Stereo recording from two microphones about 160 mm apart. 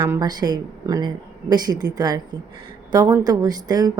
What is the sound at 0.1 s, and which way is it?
Speech, 25° right (ahead or behind).